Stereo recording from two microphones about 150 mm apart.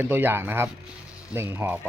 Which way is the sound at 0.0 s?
15° right (ahead or behind).